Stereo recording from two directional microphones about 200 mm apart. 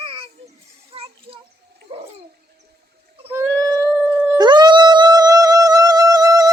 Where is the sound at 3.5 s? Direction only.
5° left (ahead or behind).